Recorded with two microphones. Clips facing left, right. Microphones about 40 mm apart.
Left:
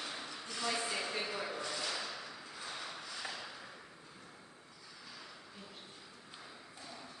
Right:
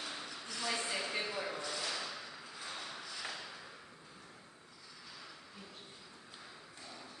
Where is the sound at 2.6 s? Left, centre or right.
Centre.